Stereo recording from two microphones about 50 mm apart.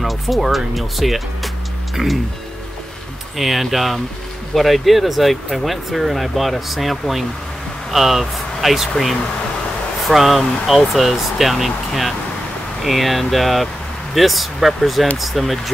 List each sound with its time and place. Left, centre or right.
0.0 s speech: centre
3.3 s speech: centre